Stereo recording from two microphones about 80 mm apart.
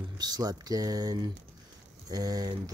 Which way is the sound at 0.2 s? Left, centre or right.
Right.